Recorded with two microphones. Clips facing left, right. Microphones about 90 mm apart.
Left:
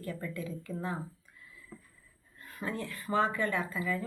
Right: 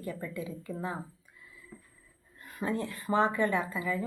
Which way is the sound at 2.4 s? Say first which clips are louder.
Right 4 dB; 20° right (ahead or behind).